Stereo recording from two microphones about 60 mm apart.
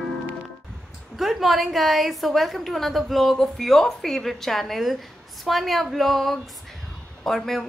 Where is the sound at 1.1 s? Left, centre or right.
Centre.